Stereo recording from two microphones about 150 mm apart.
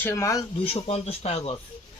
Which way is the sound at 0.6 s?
40° left (ahead or behind).